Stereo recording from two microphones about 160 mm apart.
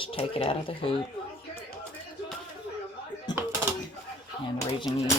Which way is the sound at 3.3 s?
25° left (ahead or behind).